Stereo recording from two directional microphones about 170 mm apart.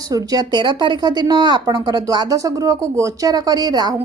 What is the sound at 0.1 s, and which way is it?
Speech, 20° right (ahead or behind).